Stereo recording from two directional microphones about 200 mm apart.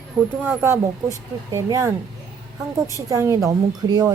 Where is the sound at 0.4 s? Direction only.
10° right (ahead or behind).